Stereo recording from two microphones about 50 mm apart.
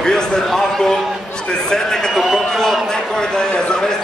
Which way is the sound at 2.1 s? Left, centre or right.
Centre.